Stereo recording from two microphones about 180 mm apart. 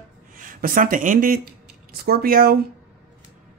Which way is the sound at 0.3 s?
50° right (ahead or behind).